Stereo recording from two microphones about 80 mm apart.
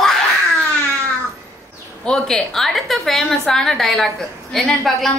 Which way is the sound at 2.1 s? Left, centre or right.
Centre.